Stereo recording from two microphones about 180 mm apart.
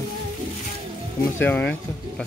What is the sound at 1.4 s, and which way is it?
Speech, 10° left (ahead or behind).